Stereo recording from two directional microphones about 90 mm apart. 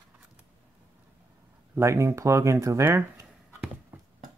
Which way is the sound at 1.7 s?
30° right (ahead or behind).